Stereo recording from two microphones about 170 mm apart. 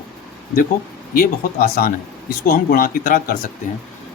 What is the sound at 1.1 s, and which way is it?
Speech, 60° left (ahead or behind).